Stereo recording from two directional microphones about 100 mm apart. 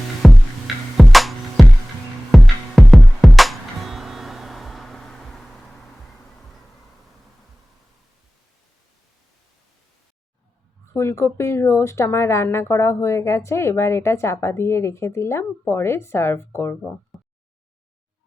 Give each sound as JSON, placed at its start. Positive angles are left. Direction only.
{"t": 0.2, "sound": "music", "side_deg": 0}
{"t": 10.9, "sound": "speech", "side_deg": 30}
{"t": 17.1, "sound": "a sound", "side_deg": 0}